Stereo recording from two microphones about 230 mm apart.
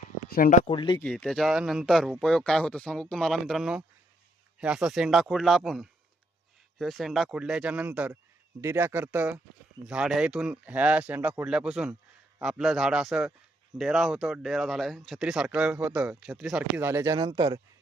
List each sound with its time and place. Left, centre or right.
0.3 s speech: left
0.7 s speech: left
0.9 s speech: centre